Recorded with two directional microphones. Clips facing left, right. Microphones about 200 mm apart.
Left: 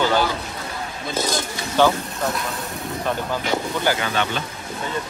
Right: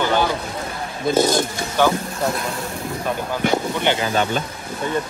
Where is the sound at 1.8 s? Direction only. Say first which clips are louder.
Left 1 dB; 10° right (ahead or behind).